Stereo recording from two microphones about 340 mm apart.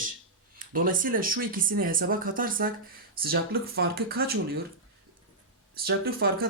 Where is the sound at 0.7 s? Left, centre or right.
Right.